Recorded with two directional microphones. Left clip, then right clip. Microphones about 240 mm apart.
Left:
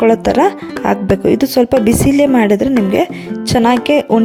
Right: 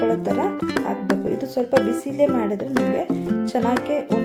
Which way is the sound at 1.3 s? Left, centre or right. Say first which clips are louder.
Left 13 dB; left.